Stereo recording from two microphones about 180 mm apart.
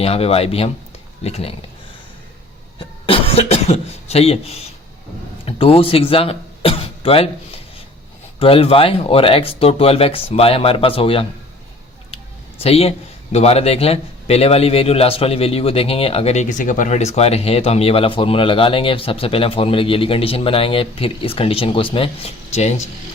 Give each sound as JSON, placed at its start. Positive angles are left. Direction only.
{"t": 0.0, "sound": "a man's voice", "side_deg": 35}
{"t": 3.1, "sound": "a man's voice", "side_deg": 30}
{"t": 12.6, "sound": "a man's voice", "side_deg": 35}